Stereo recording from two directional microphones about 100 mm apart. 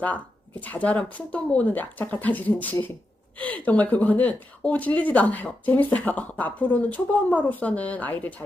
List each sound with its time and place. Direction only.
0.6 s speech: 15° left (ahead or behind)